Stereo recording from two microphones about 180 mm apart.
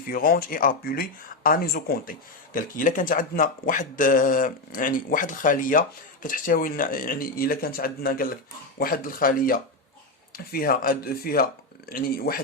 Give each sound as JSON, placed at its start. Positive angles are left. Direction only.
{"t": 0.1, "sound": "speech", "side_deg": 55}